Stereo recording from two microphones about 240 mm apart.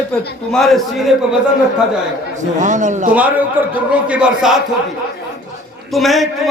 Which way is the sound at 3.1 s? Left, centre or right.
Centre.